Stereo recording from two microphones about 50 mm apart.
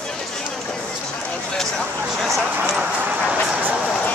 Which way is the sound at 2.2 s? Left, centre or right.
Centre.